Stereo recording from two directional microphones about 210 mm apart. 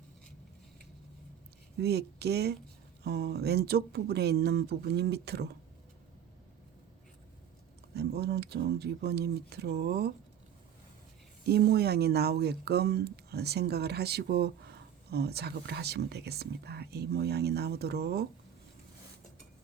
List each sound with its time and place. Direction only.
1.8 s speech: 50° right (ahead or behind)
7.9 s speech: 50° right (ahead or behind)
11.4 s speech: 50° right (ahead or behind)